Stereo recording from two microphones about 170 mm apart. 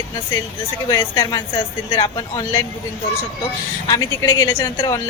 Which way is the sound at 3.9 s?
20° left (ahead or behind).